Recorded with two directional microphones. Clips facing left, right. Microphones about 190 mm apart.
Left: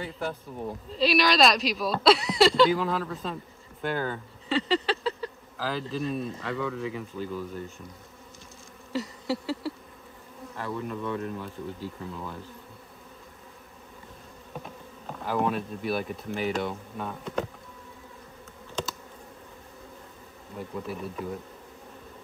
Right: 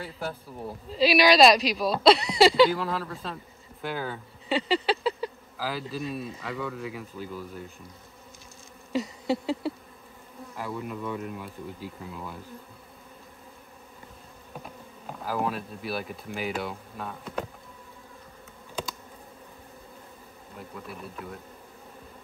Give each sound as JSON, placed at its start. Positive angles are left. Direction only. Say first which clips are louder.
{"t": 0.0, "sound": "speech", "louder": "left 2 dB", "side_deg": -5}
{"t": 8.9, "sound": "insect", "louder": "right 3 dB", "side_deg": -20}
{"t": 10.5, "sound": "speech", "louder": "left 1 dB", "side_deg": -10}
{"t": 14.5, "sound": "speech", "louder": "left 2 dB", "side_deg": -5}
{"t": 20.5, "sound": "speech", "louder": "left 6 dB", "side_deg": 0}